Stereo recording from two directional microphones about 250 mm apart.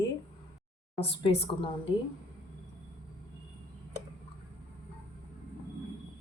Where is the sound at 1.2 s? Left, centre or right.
Left.